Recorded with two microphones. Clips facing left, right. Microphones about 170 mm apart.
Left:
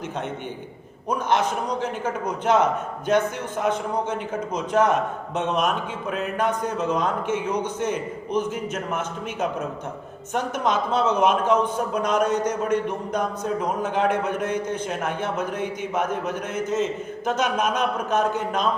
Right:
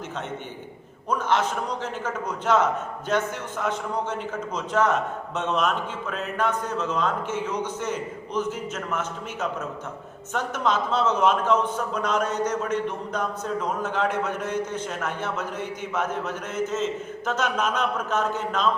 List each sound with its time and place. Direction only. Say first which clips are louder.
1.3 s a man's voice: left 2 dB; 15° left (ahead or behind)